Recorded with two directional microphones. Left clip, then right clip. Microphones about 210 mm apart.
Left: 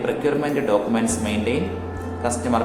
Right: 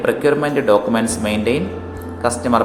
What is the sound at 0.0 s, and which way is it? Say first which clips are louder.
Speech: right 6 dB; 20° right (ahead or behind).